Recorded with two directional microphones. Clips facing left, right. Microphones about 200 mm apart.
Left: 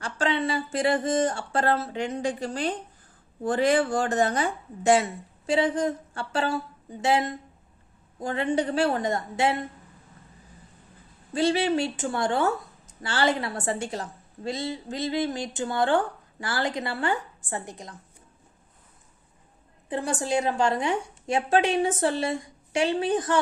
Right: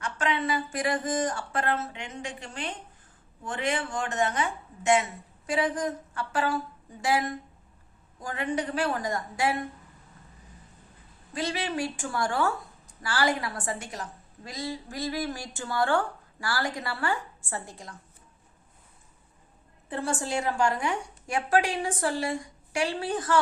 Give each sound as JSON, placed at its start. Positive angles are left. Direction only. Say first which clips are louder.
{"t": 0.0, "sound": "a woman's voice", "louder": "left 3 dB", "side_deg": 30}
{"t": 11.3, "sound": "a woman's voice", "louder": "left 7 dB", "side_deg": 30}
{"t": 19.9, "sound": "a woman's voice", "louder": "left 4 dB", "side_deg": 15}